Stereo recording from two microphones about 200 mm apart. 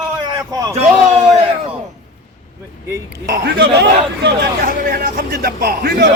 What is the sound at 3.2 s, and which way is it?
Speech, 55° right (ahead or behind).